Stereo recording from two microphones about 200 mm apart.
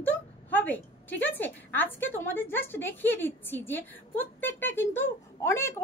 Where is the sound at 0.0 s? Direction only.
10° left (ahead or behind).